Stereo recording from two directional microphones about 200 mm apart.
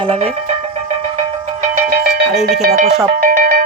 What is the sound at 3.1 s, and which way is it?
Music, 45° right (ahead or behind).